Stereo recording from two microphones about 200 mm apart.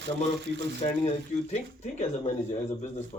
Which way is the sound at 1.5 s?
35° left (ahead or behind).